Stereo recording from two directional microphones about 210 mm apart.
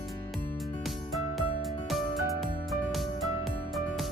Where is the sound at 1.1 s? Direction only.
Centre (ahead or behind).